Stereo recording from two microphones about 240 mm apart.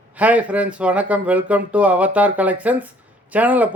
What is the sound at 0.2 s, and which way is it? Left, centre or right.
Speech, centre.